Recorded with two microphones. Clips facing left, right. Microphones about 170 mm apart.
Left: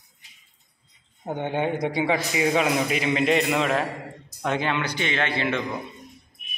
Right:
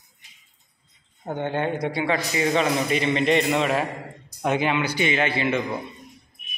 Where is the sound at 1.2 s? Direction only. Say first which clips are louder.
Even; 15° left (ahead or behind); by 5.6 s 5° right (ahead or behind).